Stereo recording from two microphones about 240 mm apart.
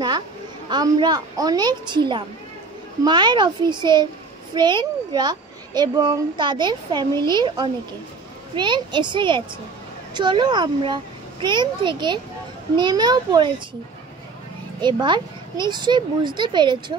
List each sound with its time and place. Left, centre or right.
0.7 s a child's voice: centre
14.8 s speech: centre